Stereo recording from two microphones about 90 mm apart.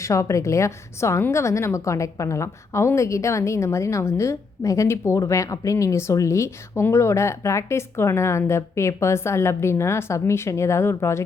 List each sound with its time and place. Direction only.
0.0 s a woman's voice: 35° left (ahead or behind)